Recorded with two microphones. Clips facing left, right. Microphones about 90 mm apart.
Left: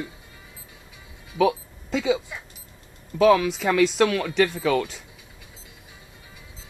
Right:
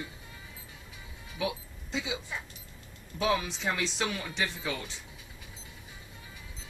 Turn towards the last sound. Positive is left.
turn(degrees=75)  # may be behind; listen again after turning